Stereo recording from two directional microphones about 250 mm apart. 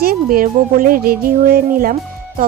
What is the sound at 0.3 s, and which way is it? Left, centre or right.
A woman's voice, right.